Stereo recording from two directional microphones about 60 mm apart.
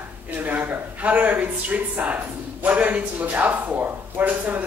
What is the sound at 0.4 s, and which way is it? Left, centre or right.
Speech, right.